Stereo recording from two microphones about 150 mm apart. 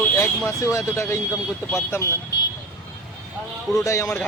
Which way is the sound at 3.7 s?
20° left (ahead or behind).